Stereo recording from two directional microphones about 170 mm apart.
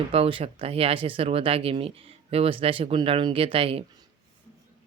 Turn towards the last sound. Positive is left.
turn(degrees=-35)  # may be behind; listen again after turning